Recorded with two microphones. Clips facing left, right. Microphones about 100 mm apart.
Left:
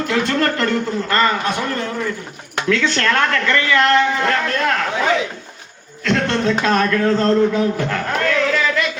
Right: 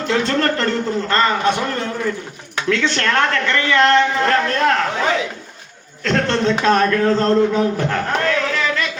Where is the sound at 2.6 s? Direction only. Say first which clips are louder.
Left 1 dB; 25° right (ahead or behind).